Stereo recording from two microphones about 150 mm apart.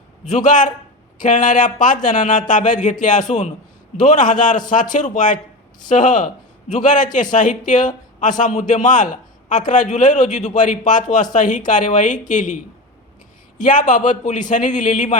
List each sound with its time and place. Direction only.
0.3 s a man's voice: 55° left (ahead or behind)
13.6 s a man's voice: 60° left (ahead or behind)